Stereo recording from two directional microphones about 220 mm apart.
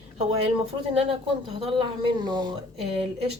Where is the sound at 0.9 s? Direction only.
25° right (ahead or behind).